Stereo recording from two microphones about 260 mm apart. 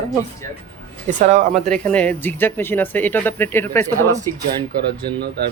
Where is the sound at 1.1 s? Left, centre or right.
Right.